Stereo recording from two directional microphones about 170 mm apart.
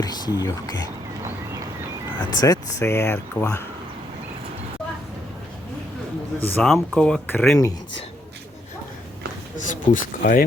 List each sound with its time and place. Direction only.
0.0 s speech: 25° left (ahead or behind)
2.3 s speech: 20° left (ahead or behind)
6.4 s speech: 10° left (ahead or behind)
9.6 s speech: 50° left (ahead or behind)